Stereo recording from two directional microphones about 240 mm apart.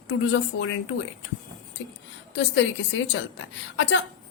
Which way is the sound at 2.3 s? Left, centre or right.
Left.